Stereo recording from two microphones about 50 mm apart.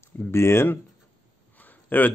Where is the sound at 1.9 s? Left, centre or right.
Left.